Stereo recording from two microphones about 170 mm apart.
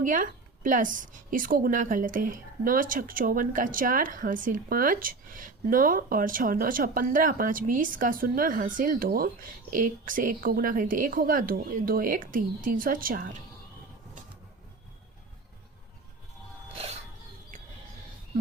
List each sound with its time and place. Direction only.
0.0 s a woman's voice: 50° right (ahead or behind)